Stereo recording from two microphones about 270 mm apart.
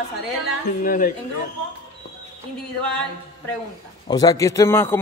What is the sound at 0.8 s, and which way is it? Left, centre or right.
Speech, left.